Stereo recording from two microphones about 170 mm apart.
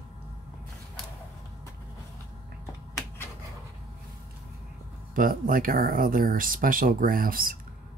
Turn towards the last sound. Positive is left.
turn(degrees=-55)  # may be behind; listen again after turning